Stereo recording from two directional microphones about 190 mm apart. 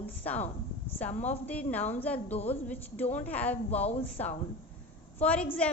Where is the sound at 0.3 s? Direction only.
35° left (ahead or behind).